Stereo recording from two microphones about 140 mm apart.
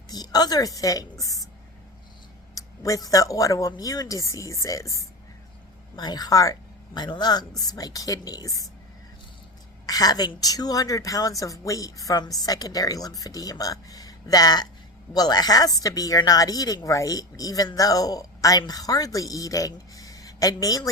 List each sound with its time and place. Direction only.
0.1 s a woman's voice: 25° left (ahead or behind)
2.6 s speech: 25° left (ahead or behind)
9.8 s speech: 25° left (ahead or behind)